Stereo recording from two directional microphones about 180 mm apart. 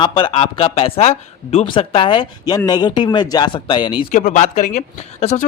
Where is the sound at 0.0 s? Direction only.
25° left (ahead or behind).